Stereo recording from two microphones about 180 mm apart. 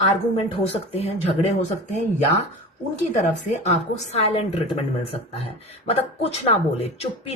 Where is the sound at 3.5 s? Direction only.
40° left (ahead or behind).